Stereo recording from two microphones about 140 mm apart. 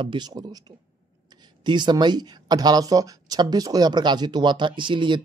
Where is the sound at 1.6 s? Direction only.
35° right (ahead or behind).